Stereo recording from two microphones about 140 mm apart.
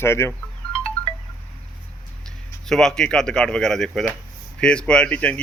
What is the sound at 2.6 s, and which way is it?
A man's voice, 5° left (ahead or behind).